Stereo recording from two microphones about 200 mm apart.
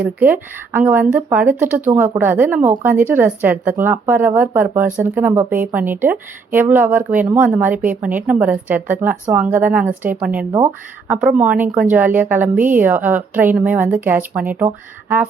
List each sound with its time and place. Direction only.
0.2 s a woman's voice: 10° right (ahead or behind)